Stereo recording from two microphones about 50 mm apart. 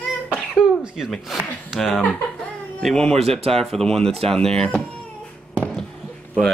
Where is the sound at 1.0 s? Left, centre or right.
Centre.